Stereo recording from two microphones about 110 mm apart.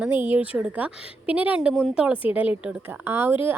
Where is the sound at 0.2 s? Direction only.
15° right (ahead or behind).